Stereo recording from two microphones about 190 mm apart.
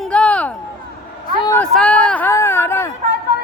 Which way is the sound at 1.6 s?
5° left (ahead or behind).